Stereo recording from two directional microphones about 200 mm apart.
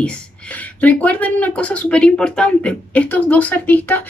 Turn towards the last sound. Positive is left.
turn(degrees=10)  # may be behind; listen again after turning